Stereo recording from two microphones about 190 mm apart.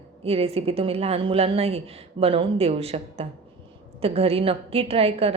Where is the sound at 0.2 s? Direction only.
30° right (ahead or behind).